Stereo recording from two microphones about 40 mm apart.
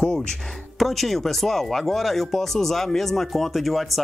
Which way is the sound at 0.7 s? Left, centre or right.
Centre.